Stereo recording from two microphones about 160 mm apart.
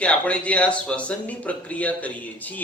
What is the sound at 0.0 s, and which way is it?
Speech, 10° left (ahead or behind).